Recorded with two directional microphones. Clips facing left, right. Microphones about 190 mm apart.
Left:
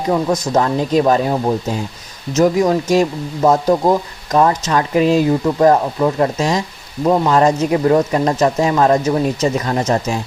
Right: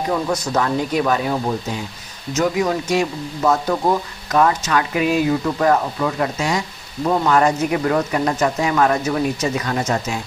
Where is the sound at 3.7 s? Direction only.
25° left (ahead or behind).